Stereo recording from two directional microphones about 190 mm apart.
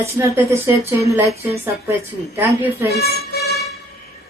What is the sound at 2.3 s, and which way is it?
Speech, 10° right (ahead or behind).